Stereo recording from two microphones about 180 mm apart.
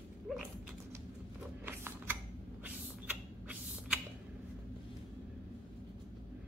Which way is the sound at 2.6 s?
10° right (ahead or behind).